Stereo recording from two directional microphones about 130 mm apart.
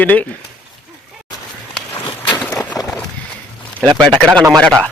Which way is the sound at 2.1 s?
35° left (ahead or behind).